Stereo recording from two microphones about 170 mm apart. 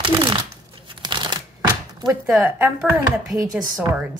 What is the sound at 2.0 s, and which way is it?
Speech, 25° right (ahead or behind).